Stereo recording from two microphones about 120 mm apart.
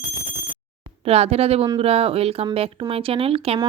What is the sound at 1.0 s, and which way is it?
A woman's voice, 60° right (ahead or behind).